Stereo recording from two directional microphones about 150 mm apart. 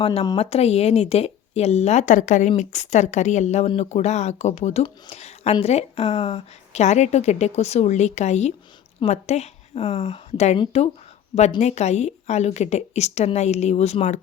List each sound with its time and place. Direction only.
0.0 s a woman's voice: 40° left (ahead or behind)
11.6 s a woman's voice: 50° left (ahead or behind)